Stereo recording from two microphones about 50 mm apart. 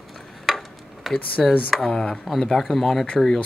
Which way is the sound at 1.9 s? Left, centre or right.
Centre.